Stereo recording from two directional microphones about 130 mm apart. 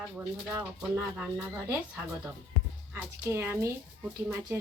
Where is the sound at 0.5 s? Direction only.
15° right (ahead or behind).